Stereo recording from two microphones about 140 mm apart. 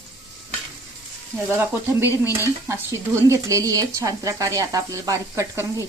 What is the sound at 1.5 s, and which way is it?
Speech, 15° right (ahead or behind).